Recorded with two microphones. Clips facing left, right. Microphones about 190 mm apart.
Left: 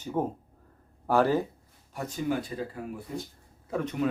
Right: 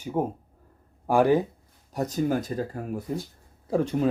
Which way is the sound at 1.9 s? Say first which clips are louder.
Right 5 dB; 40° right (ahead or behind).